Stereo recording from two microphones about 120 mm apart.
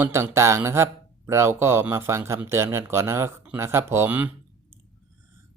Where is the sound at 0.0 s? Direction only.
20° right (ahead or behind).